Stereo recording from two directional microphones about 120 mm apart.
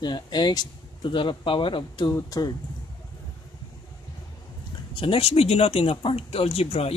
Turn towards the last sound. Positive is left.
turn(degrees=55)  # may be behind; listen again after turning